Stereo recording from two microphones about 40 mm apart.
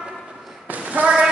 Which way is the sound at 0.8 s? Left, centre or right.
Right.